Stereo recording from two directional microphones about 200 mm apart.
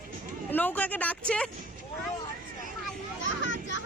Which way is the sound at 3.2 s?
70° left (ahead or behind).